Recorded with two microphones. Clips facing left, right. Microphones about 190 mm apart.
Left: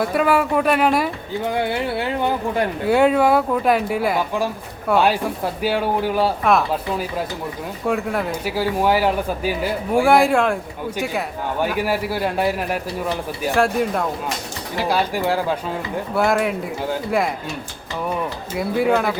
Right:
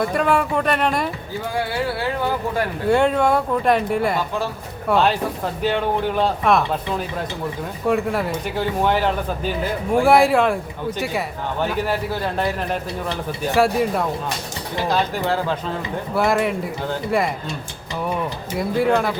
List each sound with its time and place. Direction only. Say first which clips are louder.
0.0 s speech: left 1 dB; 5° left (ahead or behind)
1.5 s speech: left 1 dB; 20° left (ahead or behind)
2.9 s a man's voice: left 2 dB; 5° left (ahead or behind)
11.6 s a man's voice: left 1 dB; 10° left (ahead or behind)
13.6 s speech: right 1 dB; centre (ahead or behind)
14.8 s a man's voice: left 1 dB; 10° left (ahead or behind)
16.1 s speech: even; centre (ahead or behind)
18.5 s speech: even; centre (ahead or behind)